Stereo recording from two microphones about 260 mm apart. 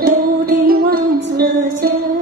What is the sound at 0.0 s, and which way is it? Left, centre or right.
Music, right.